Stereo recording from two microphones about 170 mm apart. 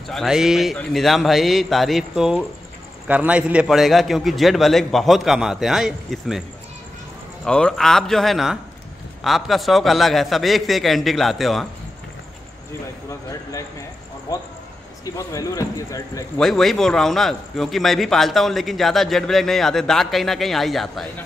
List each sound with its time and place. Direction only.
0.1 s a man's voice: centre (ahead or behind)
7.4 s a man's voice: 5° left (ahead or behind)
15.0 s speech: 20° left (ahead or behind)
16.3 s a man's voice: centre (ahead or behind)